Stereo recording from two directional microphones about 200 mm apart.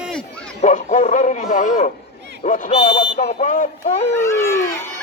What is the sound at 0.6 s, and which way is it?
A man's voice, 35° left (ahead or behind).